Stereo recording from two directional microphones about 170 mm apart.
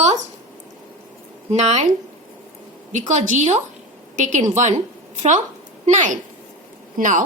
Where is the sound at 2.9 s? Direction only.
45° right (ahead or behind).